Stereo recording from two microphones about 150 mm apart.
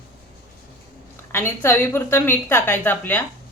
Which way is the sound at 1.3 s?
15° left (ahead or behind).